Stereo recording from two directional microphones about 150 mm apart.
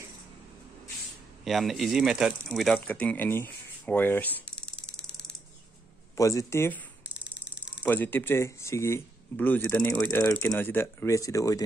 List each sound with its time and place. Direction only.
1.4 s speech: centre (ahead or behind)
4.8 s ratchet: 5° left (ahead or behind)
6.1 s speech: 20° left (ahead or behind)
7.2 s a sound: 10° right (ahead or behind)
7.8 s speech: 10° left (ahead or behind)